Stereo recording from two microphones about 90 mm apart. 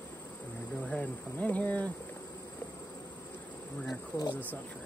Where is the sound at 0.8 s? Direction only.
15° left (ahead or behind).